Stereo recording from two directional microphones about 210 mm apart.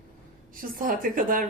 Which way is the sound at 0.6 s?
40° right (ahead or behind).